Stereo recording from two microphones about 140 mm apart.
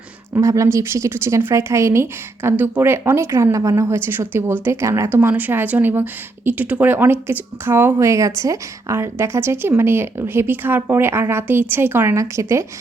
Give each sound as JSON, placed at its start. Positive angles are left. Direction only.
{"t": 0.3, "sound": "a woman's voice", "side_deg": -20}